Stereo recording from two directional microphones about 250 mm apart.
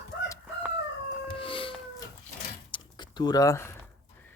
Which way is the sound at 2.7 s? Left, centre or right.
Centre.